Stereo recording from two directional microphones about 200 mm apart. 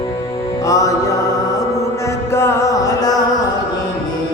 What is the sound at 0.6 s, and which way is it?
Music, 15° left (ahead or behind).